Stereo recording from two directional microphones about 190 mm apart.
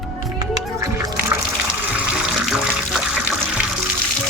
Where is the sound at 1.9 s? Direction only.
5° right (ahead or behind).